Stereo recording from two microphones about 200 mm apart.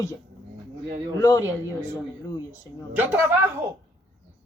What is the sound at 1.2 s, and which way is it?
Speech, 15° left (ahead or behind).